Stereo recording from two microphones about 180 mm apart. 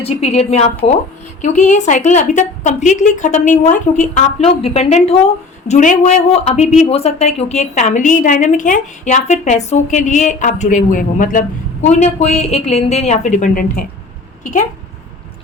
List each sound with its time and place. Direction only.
0.0 s speech: 35° left (ahead or behind)